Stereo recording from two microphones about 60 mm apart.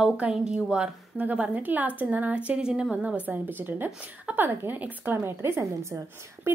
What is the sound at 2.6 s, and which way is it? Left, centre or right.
Speech, centre.